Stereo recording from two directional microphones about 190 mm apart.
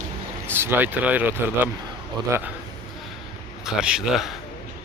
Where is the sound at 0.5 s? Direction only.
10° right (ahead or behind).